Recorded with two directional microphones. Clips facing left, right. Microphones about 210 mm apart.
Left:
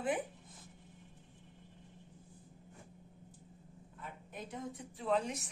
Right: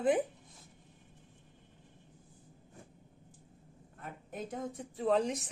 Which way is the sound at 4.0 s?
50° right (ahead or behind).